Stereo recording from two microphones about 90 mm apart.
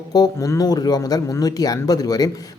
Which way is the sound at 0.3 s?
35° left (ahead or behind).